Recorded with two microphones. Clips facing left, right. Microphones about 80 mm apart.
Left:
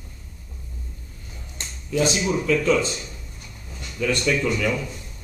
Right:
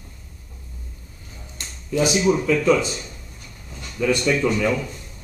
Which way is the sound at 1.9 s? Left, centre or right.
Centre.